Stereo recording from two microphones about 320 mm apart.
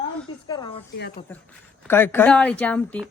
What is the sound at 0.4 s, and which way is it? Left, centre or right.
Speech, centre.